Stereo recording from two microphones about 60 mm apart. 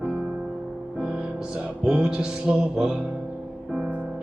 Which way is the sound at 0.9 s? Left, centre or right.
Centre.